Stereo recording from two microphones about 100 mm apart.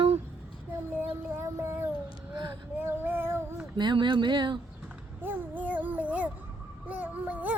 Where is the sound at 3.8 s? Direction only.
50° right (ahead or behind).